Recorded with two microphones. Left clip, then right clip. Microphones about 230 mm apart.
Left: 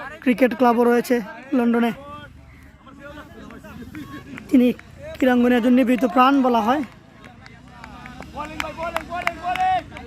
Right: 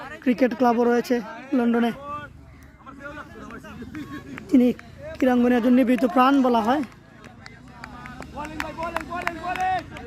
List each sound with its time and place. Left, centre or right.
0.0 s speech: centre
4.4 s speech: centre
8.3 s run: left